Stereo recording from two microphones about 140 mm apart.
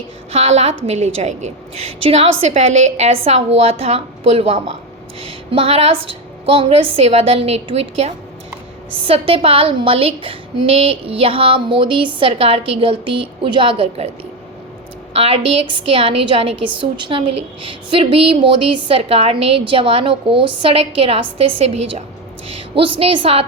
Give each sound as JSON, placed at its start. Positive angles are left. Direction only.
{"t": 0.3, "sound": "a woman's voice", "side_deg": -50}
{"t": 15.1, "sound": "a woman's voice", "side_deg": -45}